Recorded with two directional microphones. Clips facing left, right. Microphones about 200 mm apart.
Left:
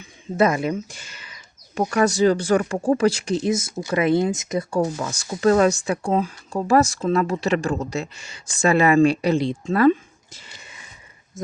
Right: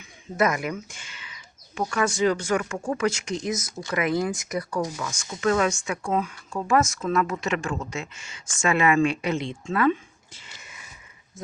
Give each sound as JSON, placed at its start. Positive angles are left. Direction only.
{"t": 0.0, "sound": "a sound", "side_deg": 30}
{"t": 1.9, "sound": "speech", "side_deg": 35}
{"t": 4.8, "sound": "speech", "side_deg": 35}